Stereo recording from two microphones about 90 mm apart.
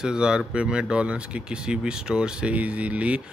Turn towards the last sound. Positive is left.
turn(degrees=-15)  # may be behind; listen again after turning